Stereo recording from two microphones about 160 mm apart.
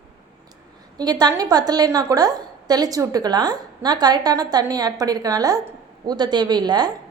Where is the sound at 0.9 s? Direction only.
25° right (ahead or behind).